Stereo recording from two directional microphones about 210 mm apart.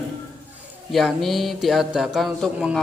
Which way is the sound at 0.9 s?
Centre (ahead or behind).